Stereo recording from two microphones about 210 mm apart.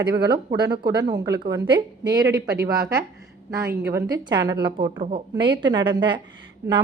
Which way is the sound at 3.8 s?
15° right (ahead or behind).